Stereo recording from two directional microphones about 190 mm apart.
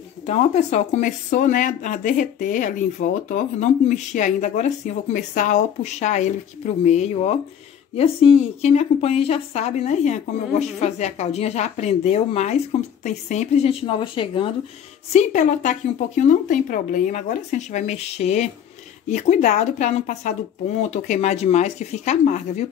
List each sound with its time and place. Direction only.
0.3 s speech: 35° left (ahead or behind)
15.1 s speech: 40° left (ahead or behind)